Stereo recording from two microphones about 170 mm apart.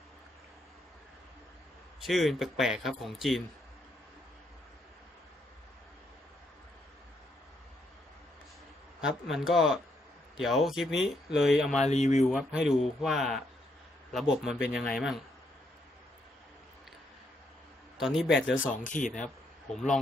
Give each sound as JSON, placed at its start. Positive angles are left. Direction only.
{"t": 2.0, "sound": "a man's voice", "side_deg": 0}
{"t": 9.0, "sound": "a man's voice", "side_deg": 0}
{"t": 11.8, "sound": "speech", "side_deg": 45}
{"t": 12.3, "sound": "a man's voice", "side_deg": -5}
{"t": 17.9, "sound": "a man's voice", "side_deg": 0}
{"t": 18.9, "sound": "speech", "side_deg": 50}
{"t": 19.2, "sound": "speech", "side_deg": 5}